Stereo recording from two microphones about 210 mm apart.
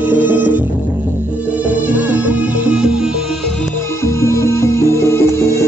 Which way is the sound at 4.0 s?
15° left (ahead or behind).